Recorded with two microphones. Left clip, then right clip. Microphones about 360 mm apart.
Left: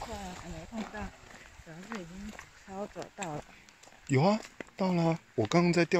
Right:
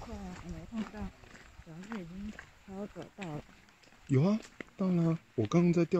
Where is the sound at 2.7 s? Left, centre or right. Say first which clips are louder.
Left 5 dB; left.